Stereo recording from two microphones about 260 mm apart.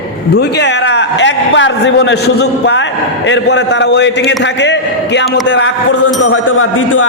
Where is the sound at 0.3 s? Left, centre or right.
Left.